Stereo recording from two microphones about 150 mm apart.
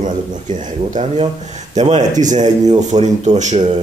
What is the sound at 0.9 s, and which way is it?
A man's voice, 40° right (ahead or behind).